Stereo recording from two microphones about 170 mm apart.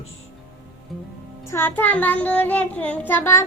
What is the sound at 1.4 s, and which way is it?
Child singing, 15° left (ahead or behind).